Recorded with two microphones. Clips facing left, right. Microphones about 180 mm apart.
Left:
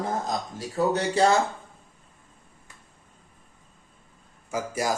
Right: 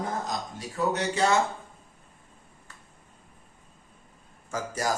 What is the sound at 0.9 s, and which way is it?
Speech, 35° left (ahead or behind).